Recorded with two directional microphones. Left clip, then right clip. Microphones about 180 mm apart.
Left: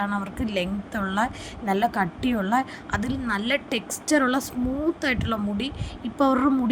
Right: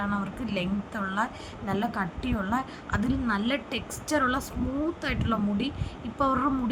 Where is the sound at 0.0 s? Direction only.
30° left (ahead or behind).